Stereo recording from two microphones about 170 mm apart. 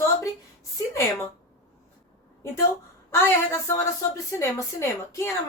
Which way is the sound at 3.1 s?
15° left (ahead or behind).